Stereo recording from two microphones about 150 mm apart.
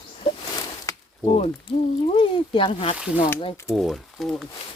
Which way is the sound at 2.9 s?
5° right (ahead or behind).